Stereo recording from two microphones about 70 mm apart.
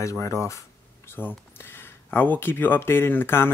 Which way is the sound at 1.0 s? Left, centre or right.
Left.